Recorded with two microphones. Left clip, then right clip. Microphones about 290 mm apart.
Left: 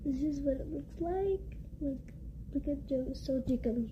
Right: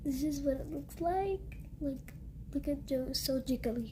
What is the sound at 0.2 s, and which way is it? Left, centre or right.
A woman's voice, right.